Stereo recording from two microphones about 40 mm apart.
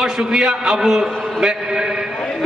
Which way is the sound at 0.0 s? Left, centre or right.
Centre.